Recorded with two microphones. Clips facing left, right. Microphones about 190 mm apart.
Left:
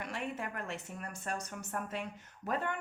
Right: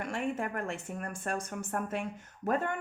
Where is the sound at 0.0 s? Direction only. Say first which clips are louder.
Right 6 dB; 50° right (ahead or behind).